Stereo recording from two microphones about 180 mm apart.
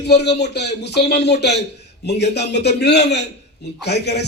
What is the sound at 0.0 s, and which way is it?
A man's voice, 65° left (ahead or behind).